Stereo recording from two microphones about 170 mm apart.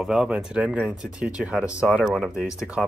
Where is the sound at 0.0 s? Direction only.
5° right (ahead or behind).